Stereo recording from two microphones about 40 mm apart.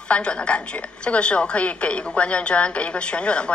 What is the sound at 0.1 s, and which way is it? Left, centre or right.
A woman's voice, left.